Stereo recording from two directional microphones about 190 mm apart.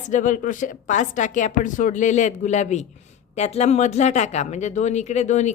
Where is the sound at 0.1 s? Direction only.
45° left (ahead or behind).